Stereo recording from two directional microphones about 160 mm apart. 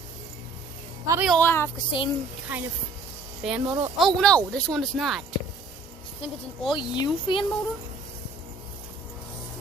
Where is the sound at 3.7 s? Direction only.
5° right (ahead or behind).